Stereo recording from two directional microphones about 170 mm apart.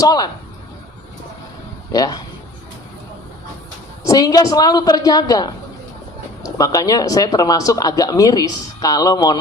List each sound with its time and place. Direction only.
0.0 s speech: 25° left (ahead or behind)
1.9 s speech: 25° left (ahead or behind)
4.0 s speech: 20° left (ahead or behind)